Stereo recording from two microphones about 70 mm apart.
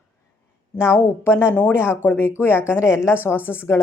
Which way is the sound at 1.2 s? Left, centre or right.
Left.